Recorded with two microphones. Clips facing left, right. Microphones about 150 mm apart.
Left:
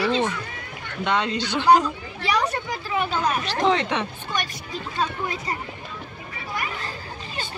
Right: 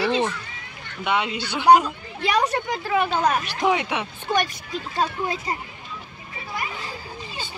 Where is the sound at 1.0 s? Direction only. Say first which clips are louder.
Left 1 dB; 10° right (ahead or behind).